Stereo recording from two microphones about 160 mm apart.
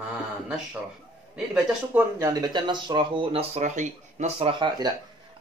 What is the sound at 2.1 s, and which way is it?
Speech, 25° right (ahead or behind).